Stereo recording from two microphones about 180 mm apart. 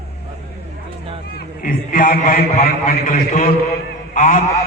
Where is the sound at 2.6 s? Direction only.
55° left (ahead or behind).